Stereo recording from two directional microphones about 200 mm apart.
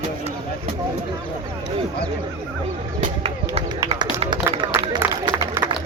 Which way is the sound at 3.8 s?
20° right (ahead or behind).